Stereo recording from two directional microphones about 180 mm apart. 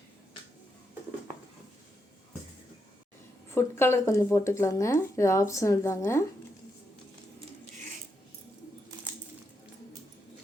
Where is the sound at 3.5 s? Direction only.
15° left (ahead or behind).